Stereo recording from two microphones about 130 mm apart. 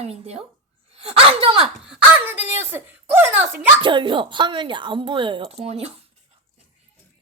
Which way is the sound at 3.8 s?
40° right (ahead or behind).